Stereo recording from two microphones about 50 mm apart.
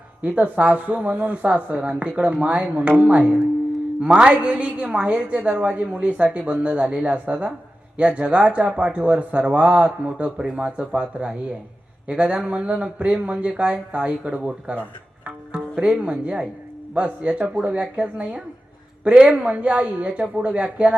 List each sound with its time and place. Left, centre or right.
0.2 s a woman's voice: right